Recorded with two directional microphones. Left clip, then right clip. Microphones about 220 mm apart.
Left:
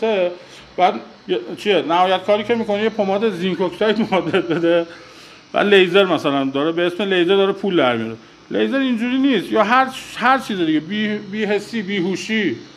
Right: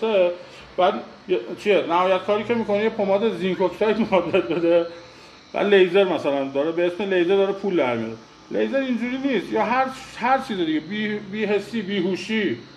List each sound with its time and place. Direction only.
0.0 s a man's voice: 45° left (ahead or behind)